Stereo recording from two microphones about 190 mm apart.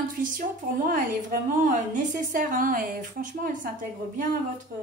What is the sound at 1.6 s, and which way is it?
A woman's voice, 40° right (ahead or behind).